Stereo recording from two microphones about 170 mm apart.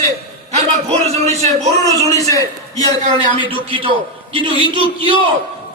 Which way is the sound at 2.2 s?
20° left (ahead or behind).